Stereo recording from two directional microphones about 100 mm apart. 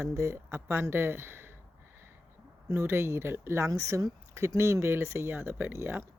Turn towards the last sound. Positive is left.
turn(degrees=-20)  # may be behind; listen again after turning